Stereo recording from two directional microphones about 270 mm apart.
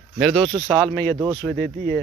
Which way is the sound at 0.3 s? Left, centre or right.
Centre.